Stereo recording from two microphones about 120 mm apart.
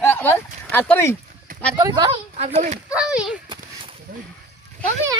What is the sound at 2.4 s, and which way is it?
Speech, 75° right (ahead or behind).